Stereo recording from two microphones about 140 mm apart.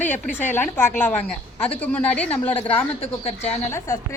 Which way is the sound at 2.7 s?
45° left (ahead or behind).